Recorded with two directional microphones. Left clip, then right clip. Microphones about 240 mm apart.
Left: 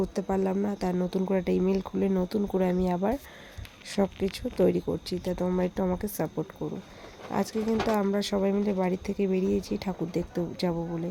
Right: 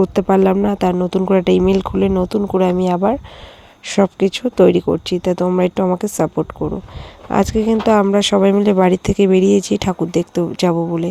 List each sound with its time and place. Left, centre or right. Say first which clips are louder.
0.0 s speech: right 15 dB; right